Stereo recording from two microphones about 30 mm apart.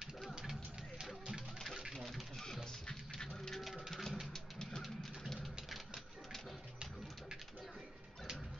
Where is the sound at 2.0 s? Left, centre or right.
Centre.